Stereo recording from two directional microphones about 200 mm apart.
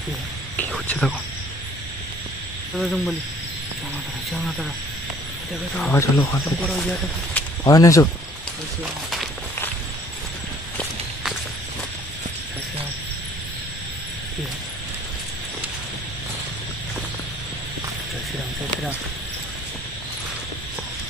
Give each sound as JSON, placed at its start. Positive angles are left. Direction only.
{"t": 0.6, "sound": "speech", "side_deg": 5}
{"t": 2.7, "sound": "speech", "side_deg": 0}
{"t": 4.3, "sound": "speech", "side_deg": 0}
{"t": 5.8, "sound": "speech", "side_deg": 10}